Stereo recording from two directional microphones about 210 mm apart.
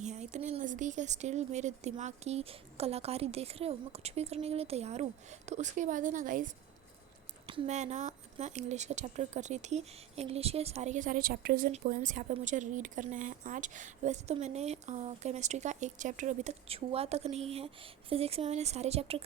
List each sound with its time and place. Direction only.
0.0 s speech: 35° right (ahead or behind)